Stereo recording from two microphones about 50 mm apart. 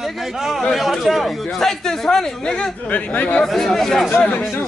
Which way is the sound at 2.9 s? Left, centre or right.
Left.